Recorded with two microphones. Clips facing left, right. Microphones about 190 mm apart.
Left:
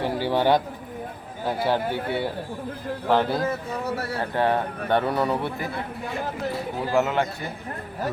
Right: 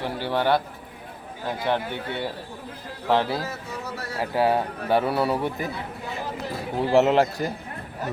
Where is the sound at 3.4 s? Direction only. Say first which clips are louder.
Left 6 dB; 55° left (ahead or behind).